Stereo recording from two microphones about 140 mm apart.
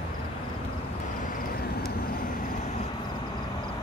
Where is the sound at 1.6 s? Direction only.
90° left.